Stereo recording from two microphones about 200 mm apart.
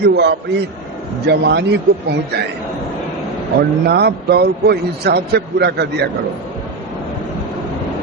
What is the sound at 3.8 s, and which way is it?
A man's voice, 55° right (ahead or behind).